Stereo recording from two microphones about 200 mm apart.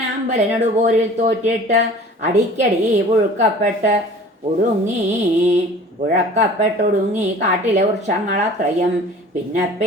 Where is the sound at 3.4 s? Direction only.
35° right (ahead or behind).